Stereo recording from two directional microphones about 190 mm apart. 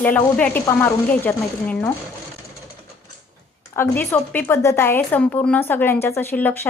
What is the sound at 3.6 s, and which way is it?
A woman's voice, 10° left (ahead or behind).